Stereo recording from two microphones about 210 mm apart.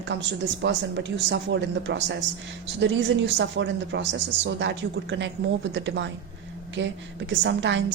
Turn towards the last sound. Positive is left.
turn(degrees=-60)  # may be behind; listen again after turning